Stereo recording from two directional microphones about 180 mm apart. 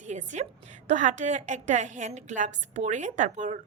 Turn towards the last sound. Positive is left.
turn(degrees=-40)  # may be behind; listen again after turning